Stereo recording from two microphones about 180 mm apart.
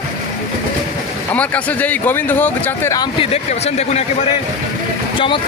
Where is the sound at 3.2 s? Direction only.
35° left (ahead or behind).